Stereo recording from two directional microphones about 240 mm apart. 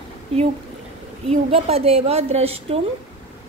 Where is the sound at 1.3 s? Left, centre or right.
Right.